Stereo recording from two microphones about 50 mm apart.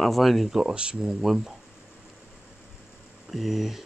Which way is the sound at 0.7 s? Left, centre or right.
Centre.